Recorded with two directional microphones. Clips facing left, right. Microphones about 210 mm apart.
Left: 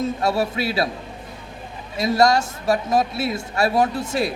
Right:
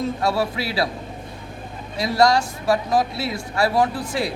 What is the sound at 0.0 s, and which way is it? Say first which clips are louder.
Speech: left 1 dB; 25° left (ahead or behind).